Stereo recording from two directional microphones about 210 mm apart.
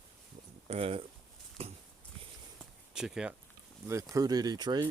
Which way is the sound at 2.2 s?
25° right (ahead or behind).